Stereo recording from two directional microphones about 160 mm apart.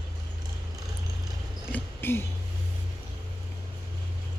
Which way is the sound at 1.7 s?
15° left (ahead or behind).